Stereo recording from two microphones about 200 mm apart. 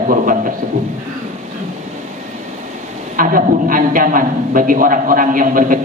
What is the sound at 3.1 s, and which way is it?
A man's voice, 45° right (ahead or behind).